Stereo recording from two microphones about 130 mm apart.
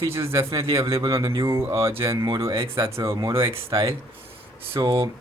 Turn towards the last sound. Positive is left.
turn(degrees=-35)  # may be behind; listen again after turning